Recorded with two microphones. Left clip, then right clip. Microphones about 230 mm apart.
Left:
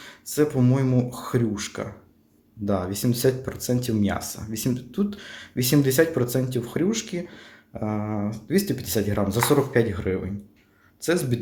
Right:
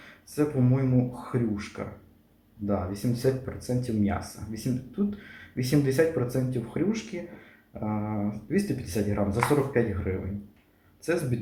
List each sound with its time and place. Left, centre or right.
0.3 s speech: left